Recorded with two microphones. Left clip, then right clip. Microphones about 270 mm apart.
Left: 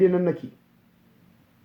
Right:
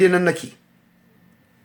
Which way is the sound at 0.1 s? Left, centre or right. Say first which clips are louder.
Right 5 dB; right.